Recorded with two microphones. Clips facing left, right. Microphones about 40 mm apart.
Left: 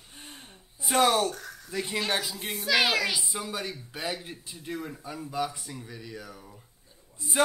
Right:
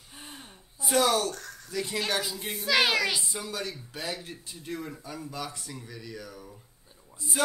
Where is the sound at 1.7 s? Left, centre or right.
Centre.